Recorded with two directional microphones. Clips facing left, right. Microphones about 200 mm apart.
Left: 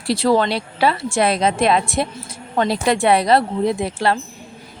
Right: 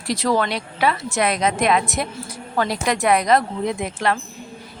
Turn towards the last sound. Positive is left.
turn(degrees=30)  # may be behind; listen again after turning